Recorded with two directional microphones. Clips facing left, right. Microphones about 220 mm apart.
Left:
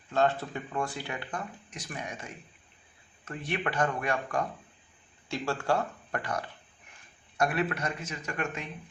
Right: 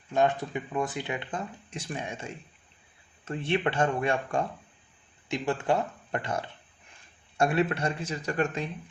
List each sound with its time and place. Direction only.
0.1 s speech: 15° right (ahead or behind); by 8.7 s 35° right (ahead or behind)